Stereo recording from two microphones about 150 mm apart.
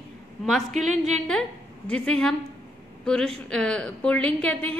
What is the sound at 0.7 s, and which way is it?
Speech, 55° right (ahead or behind).